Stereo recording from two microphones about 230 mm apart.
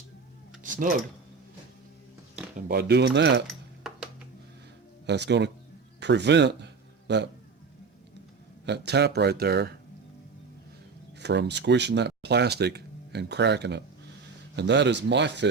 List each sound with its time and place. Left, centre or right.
0.6 s a sound: right
2.6 s speech: right
5.0 s speech: right
8.6 s speech: right
11.2 s speech: right